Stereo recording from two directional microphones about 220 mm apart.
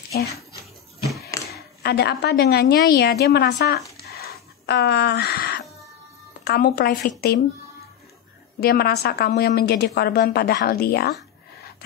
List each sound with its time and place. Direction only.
1.5 s a woman's voice: 45° left (ahead or behind)
3.9 s a sound: 45° left (ahead or behind)
6.4 s a woman's voice: 45° left (ahead or behind)
8.5 s a woman's voice: 45° left (ahead or behind)